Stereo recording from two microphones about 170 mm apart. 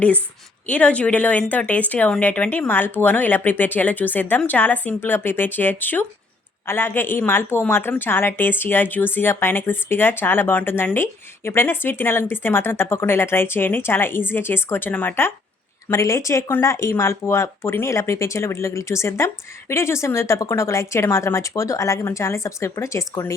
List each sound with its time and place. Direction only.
0.7 s a woman's voice: 10° left (ahead or behind)